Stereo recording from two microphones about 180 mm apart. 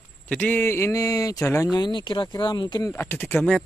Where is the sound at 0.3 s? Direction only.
10° left (ahead or behind); by 2.9 s 25° left (ahead or behind).